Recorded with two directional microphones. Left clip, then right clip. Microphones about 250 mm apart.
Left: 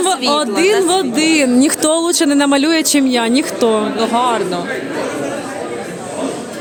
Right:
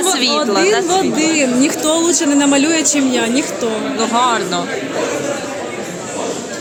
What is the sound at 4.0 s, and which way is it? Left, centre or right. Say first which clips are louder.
Speech: right 4 dB; centre.